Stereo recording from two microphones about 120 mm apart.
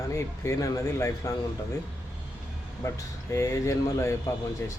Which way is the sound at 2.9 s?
25° left (ahead or behind).